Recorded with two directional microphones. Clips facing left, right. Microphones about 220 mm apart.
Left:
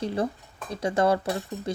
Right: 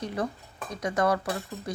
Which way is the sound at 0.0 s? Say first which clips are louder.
Left 4 dB; 30° left (ahead or behind).